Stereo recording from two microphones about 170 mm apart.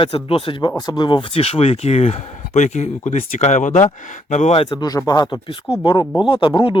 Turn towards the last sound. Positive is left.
turn(degrees=30)  # may be behind; listen again after turning